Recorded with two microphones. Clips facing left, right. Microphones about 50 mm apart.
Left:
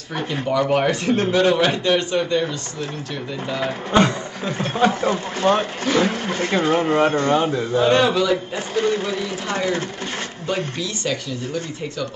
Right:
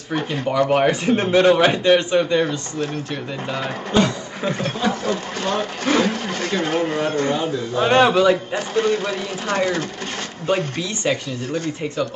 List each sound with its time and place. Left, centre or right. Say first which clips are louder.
0.1 s speech: right 1 dB; centre
4.7 s speech: left 3 dB; left
7.7 s speech: right 2 dB; right
10.4 s speech: right 4 dB; right